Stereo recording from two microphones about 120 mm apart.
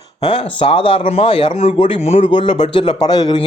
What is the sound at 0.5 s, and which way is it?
Speech, 45° left (ahead or behind).